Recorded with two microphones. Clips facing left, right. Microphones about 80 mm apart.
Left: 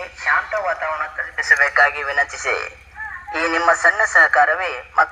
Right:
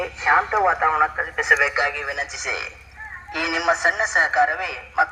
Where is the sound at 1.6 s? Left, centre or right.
Left.